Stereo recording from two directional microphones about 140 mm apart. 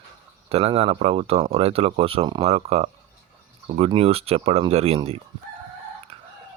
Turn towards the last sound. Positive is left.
turn(degrees=-45)  # may be behind; listen again after turning